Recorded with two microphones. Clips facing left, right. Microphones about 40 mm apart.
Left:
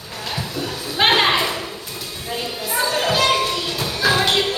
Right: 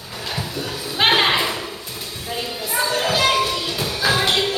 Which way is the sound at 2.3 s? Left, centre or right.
Centre.